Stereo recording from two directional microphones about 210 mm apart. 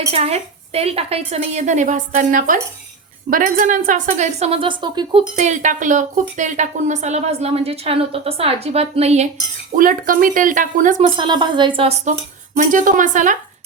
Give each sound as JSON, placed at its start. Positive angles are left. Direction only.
{"t": 0.1, "sound": "a woman's voice", "side_deg": -30}
{"t": 5.4, "sound": "a woman's voice", "side_deg": -35}
{"t": 9.7, "sound": "a woman's voice", "side_deg": -40}
{"t": 11.2, "sound": "a woman's voice", "side_deg": -20}
{"t": 12.5, "sound": "a woman's voice", "side_deg": -40}